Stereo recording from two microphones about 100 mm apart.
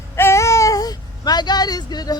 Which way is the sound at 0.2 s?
30° left (ahead or behind).